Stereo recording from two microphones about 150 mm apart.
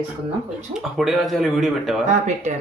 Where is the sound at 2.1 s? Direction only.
50° right (ahead or behind).